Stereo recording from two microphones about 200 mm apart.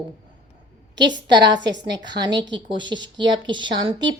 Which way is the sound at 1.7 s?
60° right (ahead or behind).